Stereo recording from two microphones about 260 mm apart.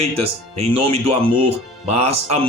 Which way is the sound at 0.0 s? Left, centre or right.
Right.